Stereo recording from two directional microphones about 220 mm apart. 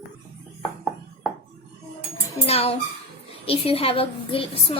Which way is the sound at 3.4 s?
25° left (ahead or behind).